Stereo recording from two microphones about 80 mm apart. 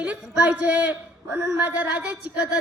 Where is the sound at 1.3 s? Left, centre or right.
Right.